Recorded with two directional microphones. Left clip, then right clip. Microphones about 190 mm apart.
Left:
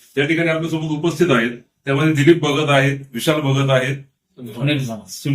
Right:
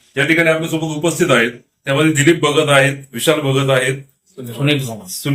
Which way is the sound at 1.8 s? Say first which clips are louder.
Right 2 dB; 20° right (ahead or behind).